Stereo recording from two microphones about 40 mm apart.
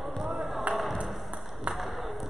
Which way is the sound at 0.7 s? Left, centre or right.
Right.